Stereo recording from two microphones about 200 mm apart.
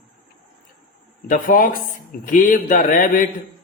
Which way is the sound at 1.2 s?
45° left (ahead or behind).